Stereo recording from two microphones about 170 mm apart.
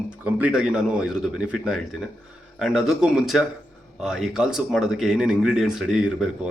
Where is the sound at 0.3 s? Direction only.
10° right (ahead or behind).